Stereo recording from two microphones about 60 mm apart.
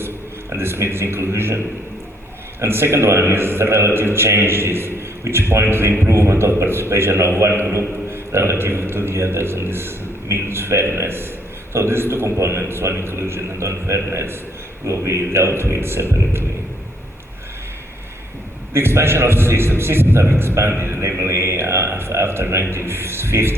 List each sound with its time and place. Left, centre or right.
0.5 s a man's voice: right
18.7 s a man's voice: right